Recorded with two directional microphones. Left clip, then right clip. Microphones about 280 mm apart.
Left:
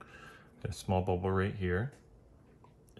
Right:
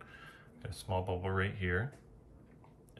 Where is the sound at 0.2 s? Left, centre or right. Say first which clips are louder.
Left 4 dB; centre.